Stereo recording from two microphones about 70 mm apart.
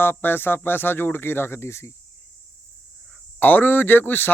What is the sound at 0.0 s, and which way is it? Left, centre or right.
Speech, left.